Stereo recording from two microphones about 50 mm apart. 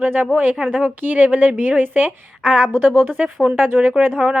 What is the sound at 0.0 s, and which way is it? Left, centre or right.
A woman's voice, right.